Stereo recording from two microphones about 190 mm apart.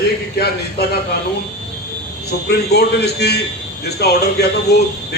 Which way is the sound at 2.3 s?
55° left (ahead or behind).